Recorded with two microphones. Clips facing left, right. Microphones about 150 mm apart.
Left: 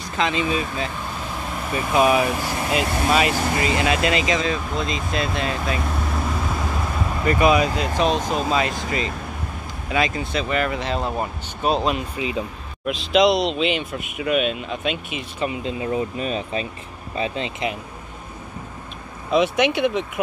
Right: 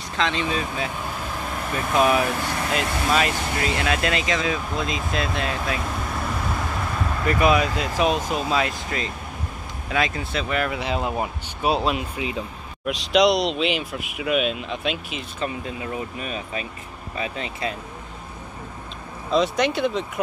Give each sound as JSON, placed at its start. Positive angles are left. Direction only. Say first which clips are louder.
{"t": 0.2, "sound": "speech", "louder": "left 2 dB", "side_deg": 10}
{"t": 1.7, "sound": "speech", "louder": "left 2 dB", "side_deg": 5}
{"t": 7.2, "sound": "speech", "louder": "left 2 dB", "side_deg": 0}
{"t": 9.8, "sound": "speech", "louder": "left 2 dB", "side_deg": 0}
{"t": 15.4, "sound": "speech", "louder": "left 4 dB", "side_deg": 25}
{"t": 19.3, "sound": "speech", "louder": "left 2 dB", "side_deg": 60}